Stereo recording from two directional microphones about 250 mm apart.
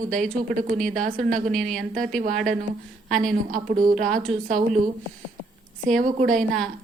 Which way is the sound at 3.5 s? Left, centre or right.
Right.